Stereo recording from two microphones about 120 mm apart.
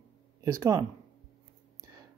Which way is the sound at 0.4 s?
25° right (ahead or behind).